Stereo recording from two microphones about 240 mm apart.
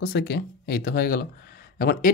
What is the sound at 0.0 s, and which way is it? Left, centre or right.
Speech, left.